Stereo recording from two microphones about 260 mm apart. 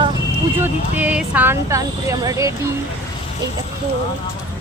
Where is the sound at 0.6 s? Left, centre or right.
Centre.